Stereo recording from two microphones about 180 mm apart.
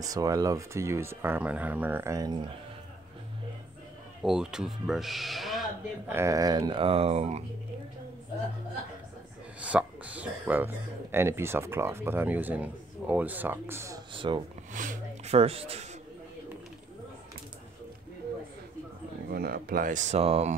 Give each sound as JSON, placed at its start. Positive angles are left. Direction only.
{"t": 0.0, "sound": "speech", "side_deg": -20}
{"t": 4.2, "sound": "speech", "side_deg": 0}
{"t": 6.0, "sound": "speech", "side_deg": -15}
{"t": 9.6, "sound": "speech", "side_deg": -5}
{"t": 14.1, "sound": "speech", "side_deg": -25}
{"t": 14.7, "sound": "speech", "side_deg": -45}
{"t": 15.3, "sound": "speech", "side_deg": -35}
{"t": 19.2, "sound": "speech", "side_deg": -55}